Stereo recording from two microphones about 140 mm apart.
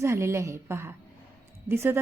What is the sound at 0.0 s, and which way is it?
A woman's voice, 20° right (ahead or behind).